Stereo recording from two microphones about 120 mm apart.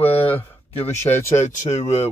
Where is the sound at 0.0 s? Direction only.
55° left (ahead or behind).